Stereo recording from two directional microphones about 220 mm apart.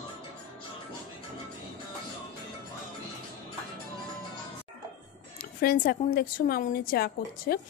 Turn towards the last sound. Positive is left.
turn(degrees=45)  # may be behind; listen again after turning